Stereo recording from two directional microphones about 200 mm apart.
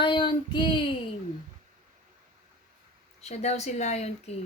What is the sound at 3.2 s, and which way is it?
Speech, 35° left (ahead or behind).